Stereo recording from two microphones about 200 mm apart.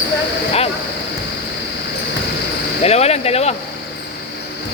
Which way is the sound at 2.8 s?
30° left (ahead or behind).